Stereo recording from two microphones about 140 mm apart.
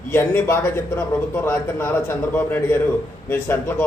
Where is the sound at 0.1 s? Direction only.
15° left (ahead or behind).